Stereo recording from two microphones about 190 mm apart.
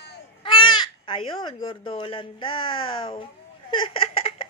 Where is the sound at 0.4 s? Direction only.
25° left (ahead or behind).